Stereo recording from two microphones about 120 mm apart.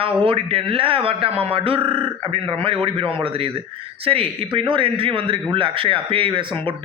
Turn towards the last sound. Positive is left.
turn(degrees=-45)  # may be behind; listen again after turning